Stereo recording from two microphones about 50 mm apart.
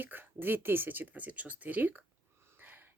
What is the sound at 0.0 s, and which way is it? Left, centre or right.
Speech, right.